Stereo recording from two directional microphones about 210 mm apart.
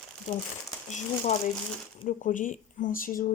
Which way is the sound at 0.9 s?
35° left (ahead or behind).